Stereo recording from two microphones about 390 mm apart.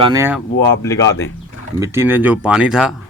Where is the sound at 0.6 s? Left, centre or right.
Centre.